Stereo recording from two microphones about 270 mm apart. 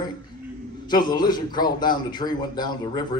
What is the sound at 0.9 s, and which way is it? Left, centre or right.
A man's voice, centre.